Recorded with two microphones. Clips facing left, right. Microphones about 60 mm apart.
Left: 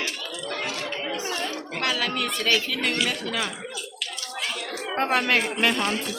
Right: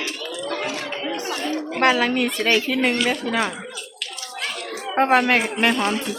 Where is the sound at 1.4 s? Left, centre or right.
Right.